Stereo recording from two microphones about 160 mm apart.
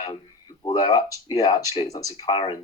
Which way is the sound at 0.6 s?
30° left (ahead or behind).